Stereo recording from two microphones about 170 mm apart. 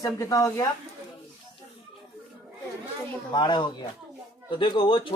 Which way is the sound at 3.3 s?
25° left (ahead or behind).